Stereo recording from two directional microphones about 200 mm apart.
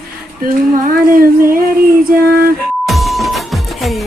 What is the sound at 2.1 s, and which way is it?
Female singing, 50° right (ahead or behind).